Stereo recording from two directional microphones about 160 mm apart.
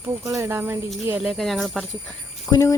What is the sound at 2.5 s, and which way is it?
Speech, 20° left (ahead or behind).